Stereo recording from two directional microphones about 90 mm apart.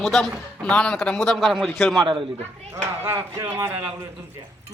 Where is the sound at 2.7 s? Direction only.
30° right (ahead or behind).